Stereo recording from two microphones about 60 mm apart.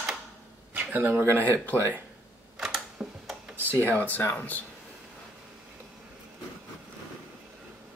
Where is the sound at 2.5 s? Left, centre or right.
Centre.